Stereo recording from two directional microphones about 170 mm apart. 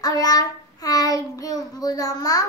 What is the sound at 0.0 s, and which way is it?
Child singing, 20° left (ahead or behind).